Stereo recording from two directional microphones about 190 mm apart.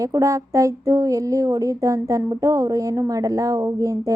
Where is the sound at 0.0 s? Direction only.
15° right (ahead or behind).